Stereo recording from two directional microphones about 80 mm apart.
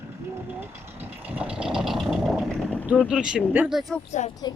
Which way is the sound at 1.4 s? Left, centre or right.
Centre.